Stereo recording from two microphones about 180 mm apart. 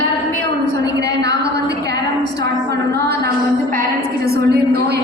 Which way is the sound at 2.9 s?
65° right (ahead or behind).